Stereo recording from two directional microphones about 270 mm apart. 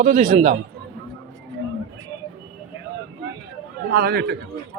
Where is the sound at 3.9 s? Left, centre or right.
Right.